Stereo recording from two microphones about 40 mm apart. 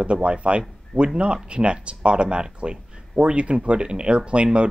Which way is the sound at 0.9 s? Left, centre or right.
Centre.